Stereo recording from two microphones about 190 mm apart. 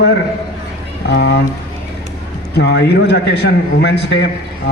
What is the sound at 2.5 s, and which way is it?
Speech, 60° left (ahead or behind).